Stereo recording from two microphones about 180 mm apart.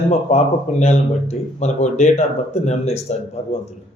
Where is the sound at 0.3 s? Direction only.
35° left (ahead or behind).